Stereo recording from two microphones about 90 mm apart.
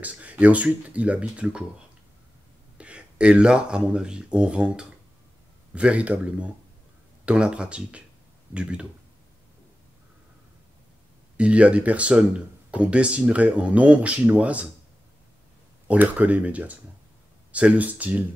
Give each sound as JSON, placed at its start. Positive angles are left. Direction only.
{"t": 0.0, "sound": "speech", "side_deg": -15}
{"t": 2.8, "sound": "speech", "side_deg": -15}
{"t": 11.3, "sound": "speech", "side_deg": -15}
{"t": 15.9, "sound": "speech", "side_deg": -15}